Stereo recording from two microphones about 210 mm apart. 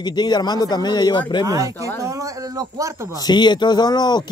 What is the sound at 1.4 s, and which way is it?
A man's voice, 15° right (ahead or behind).